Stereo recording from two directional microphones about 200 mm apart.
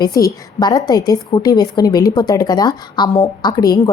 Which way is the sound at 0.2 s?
15° left (ahead or behind).